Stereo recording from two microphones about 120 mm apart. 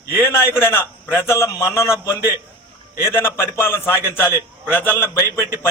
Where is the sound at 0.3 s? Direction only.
20° left (ahead or behind).